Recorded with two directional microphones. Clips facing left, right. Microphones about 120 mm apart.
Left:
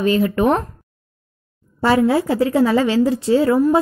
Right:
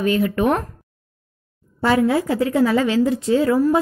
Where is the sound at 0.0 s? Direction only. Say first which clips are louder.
Left 2 dB; 30° left (ahead or behind).